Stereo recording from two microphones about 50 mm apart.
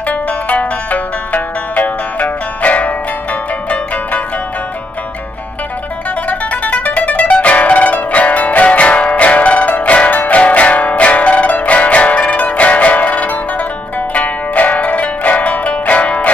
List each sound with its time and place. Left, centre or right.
0.0 s music: left
6.2 s music: left